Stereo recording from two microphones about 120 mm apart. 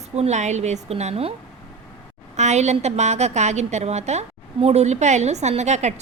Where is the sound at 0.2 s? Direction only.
75° right (ahead or behind).